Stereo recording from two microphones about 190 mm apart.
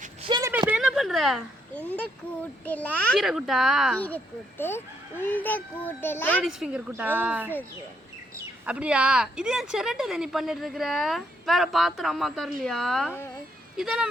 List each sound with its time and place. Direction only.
0.2 s a sound: 25° right (ahead or behind)
0.7 s speech: centre (ahead or behind)
6.4 s speech: 5° right (ahead or behind)